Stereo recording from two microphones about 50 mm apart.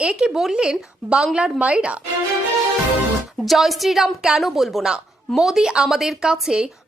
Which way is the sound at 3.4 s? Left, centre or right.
Centre.